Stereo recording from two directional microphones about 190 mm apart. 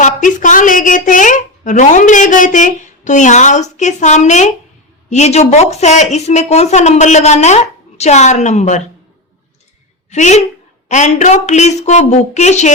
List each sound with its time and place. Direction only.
0.0 s a woman's voice: 40° left (ahead or behind)
10.1 s a woman's voice: 35° left (ahead or behind)